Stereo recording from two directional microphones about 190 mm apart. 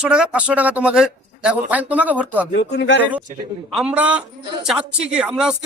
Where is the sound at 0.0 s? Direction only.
5° right (ahead or behind).